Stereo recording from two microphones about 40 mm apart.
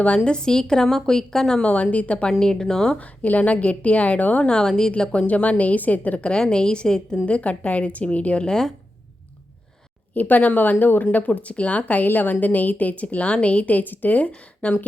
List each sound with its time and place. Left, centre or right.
0.3 s a woman's voice: left
1.6 s a woman's voice: left
2.4 s a woman's voice: centre
3.2 s a woman's voice: left
4.4 s a woman's voice: centre
5.2 s a woman's voice: left
6.4 s a woman's voice: left
7.3 s a woman's voice: left
8.4 s a woman's voice: centre
10.2 s a woman's voice: left
12.0 s a woman's voice: left